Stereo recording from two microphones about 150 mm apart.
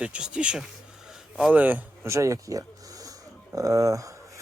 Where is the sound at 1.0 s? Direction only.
5° right (ahead or behind); by 4.4 s 20° right (ahead or behind).